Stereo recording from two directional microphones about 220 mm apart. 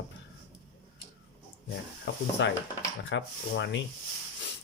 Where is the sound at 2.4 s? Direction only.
55° left (ahead or behind).